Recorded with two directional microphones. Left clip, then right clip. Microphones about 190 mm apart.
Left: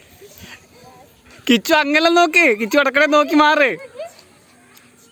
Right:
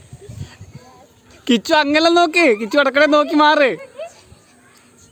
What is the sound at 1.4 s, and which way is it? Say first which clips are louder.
Speech: even; 5° left (ahead or behind).